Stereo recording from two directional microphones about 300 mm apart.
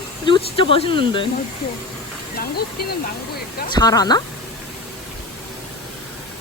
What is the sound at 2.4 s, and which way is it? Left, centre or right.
Speech, left.